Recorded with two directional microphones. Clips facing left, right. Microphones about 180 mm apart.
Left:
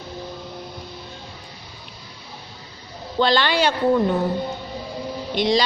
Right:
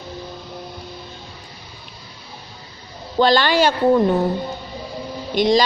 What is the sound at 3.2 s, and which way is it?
Speech, 45° right (ahead or behind).